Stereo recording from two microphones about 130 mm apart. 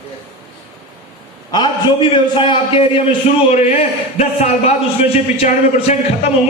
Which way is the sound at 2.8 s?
55° left (ahead or behind).